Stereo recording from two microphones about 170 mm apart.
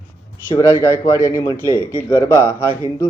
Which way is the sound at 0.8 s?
15° left (ahead or behind).